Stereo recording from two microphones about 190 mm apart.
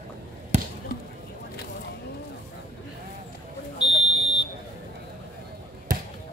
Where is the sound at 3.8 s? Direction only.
25° left (ahead or behind).